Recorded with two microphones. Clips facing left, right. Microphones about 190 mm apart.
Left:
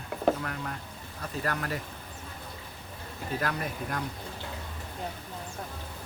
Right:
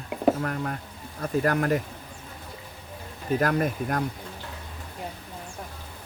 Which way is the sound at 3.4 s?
50° right (ahead or behind).